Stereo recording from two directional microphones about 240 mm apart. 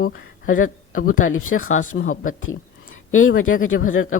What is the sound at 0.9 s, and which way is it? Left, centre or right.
Speech, left.